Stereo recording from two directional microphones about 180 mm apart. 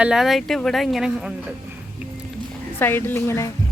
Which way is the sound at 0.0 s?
Centre (ahead or behind).